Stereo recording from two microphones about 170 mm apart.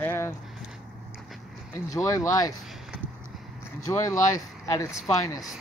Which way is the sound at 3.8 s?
15° left (ahead or behind).